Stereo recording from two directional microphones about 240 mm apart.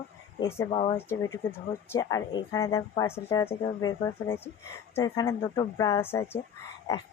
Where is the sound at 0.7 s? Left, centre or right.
Left.